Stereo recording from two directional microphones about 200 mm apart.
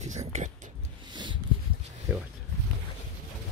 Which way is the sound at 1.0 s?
25° right (ahead or behind).